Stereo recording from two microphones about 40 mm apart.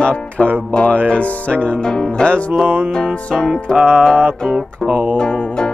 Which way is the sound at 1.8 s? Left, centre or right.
Centre.